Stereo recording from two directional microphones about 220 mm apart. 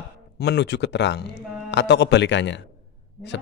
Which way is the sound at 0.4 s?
50° left (ahead or behind).